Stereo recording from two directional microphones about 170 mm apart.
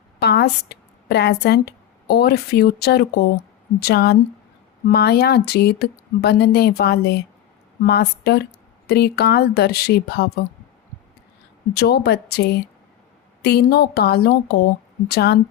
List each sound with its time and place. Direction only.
0.2 s a woman's voice: 75° left (ahead or behind)
11.7 s speech: 70° left (ahead or behind)